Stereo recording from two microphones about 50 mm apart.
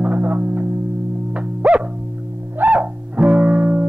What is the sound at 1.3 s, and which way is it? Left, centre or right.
Music, right.